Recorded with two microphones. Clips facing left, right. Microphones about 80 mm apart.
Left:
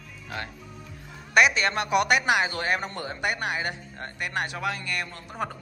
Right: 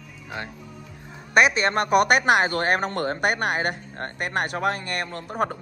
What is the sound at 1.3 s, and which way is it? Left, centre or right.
A man's voice, right.